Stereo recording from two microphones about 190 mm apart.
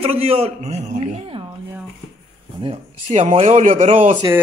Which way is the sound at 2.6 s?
30° right (ahead or behind).